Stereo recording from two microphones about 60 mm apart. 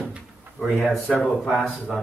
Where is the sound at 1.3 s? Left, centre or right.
Centre.